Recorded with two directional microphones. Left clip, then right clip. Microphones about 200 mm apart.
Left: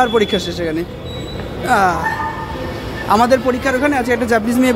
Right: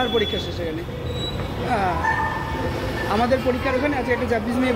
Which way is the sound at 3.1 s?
35° left (ahead or behind).